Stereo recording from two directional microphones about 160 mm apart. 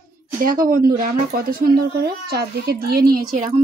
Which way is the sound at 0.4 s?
60° right (ahead or behind).